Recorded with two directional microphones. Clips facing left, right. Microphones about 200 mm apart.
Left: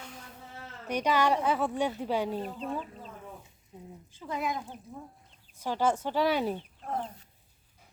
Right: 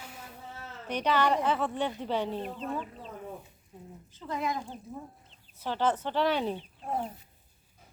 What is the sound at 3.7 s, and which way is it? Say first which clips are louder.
Speech: left 1 dB; 20° left (ahead or behind).